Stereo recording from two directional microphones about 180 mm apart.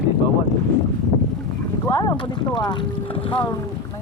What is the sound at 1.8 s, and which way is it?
Speech, 20° left (ahead or behind).